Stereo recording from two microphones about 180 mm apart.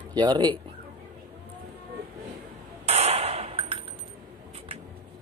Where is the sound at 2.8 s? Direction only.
35° right (ahead or behind).